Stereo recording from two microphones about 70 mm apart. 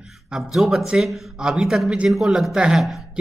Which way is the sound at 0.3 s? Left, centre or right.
Centre.